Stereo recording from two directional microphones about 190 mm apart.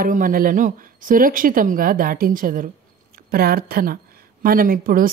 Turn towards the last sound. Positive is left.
turn(degrees=-50)  # may be behind; listen again after turning